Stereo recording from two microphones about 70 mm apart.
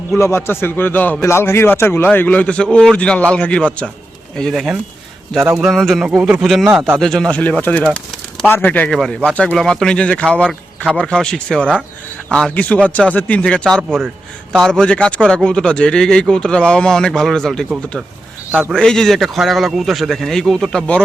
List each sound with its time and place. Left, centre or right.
0.1 s a man's voice: left; by 6.1 s centre
6.1 s a man's voice: centre
7.3 s a man's voice: centre
8.9 s speech: centre
9.3 s a man's voice: left
9.6 s a man's voice: centre
18.7 s a man's voice: centre